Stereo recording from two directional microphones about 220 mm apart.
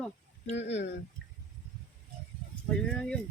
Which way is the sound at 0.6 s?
50° left (ahead or behind).